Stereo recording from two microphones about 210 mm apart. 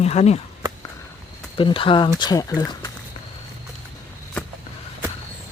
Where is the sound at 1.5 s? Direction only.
25° left (ahead or behind).